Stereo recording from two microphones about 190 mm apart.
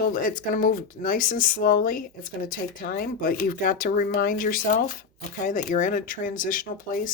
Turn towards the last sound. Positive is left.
turn(degrees=45)  # may be behind; listen again after turning